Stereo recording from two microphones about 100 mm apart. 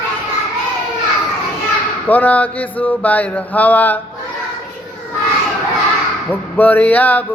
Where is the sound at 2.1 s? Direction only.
15° left (ahead or behind).